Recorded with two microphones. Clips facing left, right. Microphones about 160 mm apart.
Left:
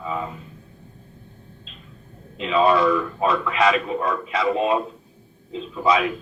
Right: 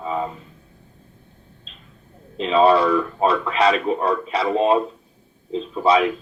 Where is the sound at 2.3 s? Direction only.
30° right (ahead or behind).